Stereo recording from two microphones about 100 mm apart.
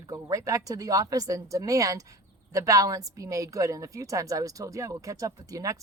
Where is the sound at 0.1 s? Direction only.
35° right (ahead or behind).